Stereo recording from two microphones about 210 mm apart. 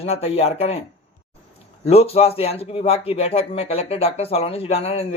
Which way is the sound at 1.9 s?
30° left (ahead or behind).